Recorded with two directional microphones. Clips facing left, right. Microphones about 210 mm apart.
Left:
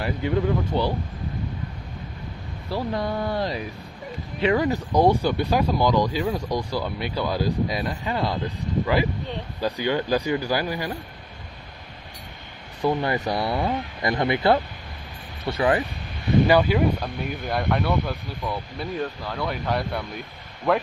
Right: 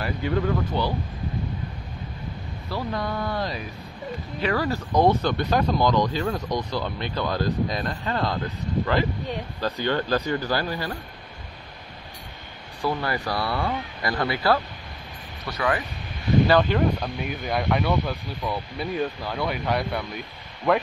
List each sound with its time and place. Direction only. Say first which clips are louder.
0.0 s speech: left 1 dB; 20° left (ahead or behind)
2.7 s speech: left 2 dB; 30° left (ahead or behind); by 8.4 s 10° left (ahead or behind)
9.6 s speech: left 2 dB; 15° left (ahead or behind)
12.8 s speech: left 3 dB; 20° left (ahead or behind)
16.4 s speech: left 2 dB; 10° left (ahead or behind)